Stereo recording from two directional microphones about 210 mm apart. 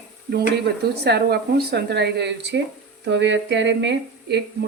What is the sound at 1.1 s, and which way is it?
Speech, 50° right (ahead or behind).